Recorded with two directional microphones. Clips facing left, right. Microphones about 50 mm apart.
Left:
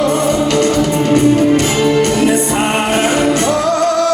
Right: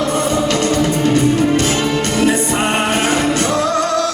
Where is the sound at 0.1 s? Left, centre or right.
Left.